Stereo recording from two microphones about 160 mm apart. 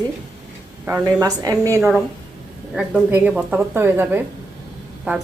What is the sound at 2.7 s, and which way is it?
A woman's voice, 5° right (ahead or behind).